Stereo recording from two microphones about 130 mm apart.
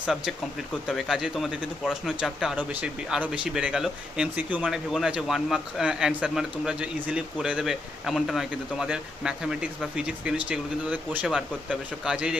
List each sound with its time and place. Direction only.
0.0 s speech: centre (ahead or behind)